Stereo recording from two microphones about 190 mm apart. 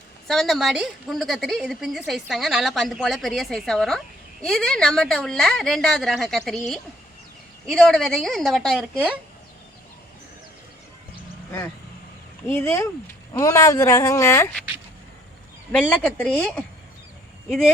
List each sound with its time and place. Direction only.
0.3 s a woman's voice: centre (ahead or behind)
12.5 s speech: 10° left (ahead or behind)
15.7 s speech: 5° left (ahead or behind)